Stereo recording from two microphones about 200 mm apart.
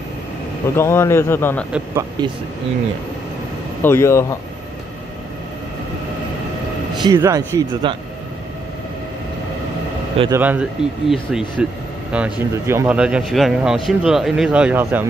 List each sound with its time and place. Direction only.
0.7 s a man's voice: 10° left (ahead or behind)
2.0 s a man's voice: 20° right (ahead or behind)
3.8 s a man's voice: 10° left (ahead or behind)
7.0 s a man's voice: 20° right (ahead or behind)
10.3 s a man's voice: 10° right (ahead or behind)